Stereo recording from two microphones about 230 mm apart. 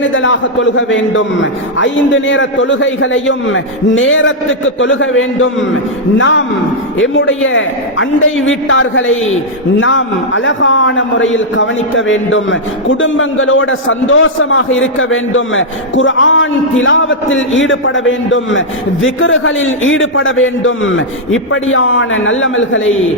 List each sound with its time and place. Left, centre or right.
0.1 s a man's voice: left